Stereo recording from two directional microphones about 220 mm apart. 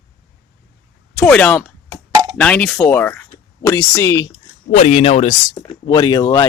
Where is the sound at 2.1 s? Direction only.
20° right (ahead or behind).